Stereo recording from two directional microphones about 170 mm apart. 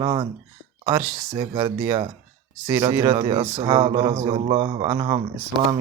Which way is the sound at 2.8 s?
25° right (ahead or behind).